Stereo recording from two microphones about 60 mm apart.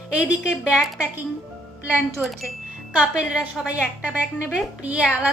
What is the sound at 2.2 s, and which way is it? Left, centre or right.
Speech, centre.